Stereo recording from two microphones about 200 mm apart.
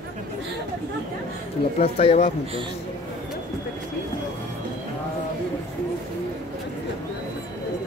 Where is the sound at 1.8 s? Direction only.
30° left (ahead or behind).